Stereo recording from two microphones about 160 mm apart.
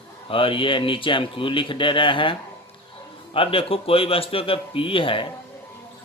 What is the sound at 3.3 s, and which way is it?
Speech, 35° left (ahead or behind).